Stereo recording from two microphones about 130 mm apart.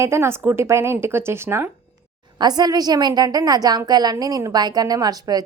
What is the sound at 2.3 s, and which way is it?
A woman's voice, 30° right (ahead or behind).